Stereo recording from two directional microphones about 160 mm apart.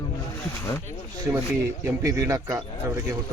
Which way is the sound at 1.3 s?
15° right (ahead or behind).